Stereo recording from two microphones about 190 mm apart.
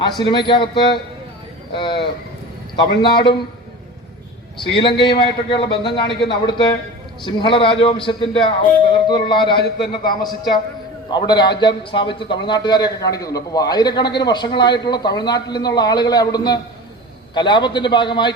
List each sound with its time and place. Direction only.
0.2 s a man's voice: 25° left (ahead or behind)
4.7 s a man's voice: 25° left (ahead or behind)
9.6 s a man's voice: 60° left (ahead or behind)
11.1 s a man's voice: 25° left (ahead or behind)